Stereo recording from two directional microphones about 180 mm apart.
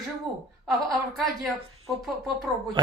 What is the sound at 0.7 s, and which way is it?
A woman's voice, centre (ahead or behind).